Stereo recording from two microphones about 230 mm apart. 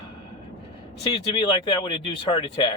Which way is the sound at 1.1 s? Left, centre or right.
Left.